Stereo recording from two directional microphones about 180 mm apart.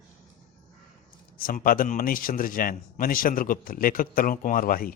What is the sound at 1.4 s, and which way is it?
A man's voice, 55° left (ahead or behind).